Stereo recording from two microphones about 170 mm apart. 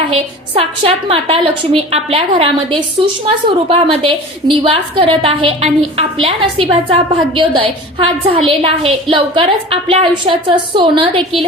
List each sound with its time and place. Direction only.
0.1 s a woman's voice: 35° right (ahead or behind)